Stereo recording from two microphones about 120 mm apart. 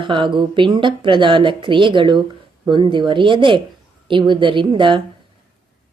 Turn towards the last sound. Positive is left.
turn(degrees=-45)  # may be behind; listen again after turning